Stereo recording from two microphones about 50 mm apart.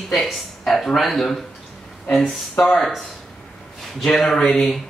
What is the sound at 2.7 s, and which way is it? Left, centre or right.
Speech, centre.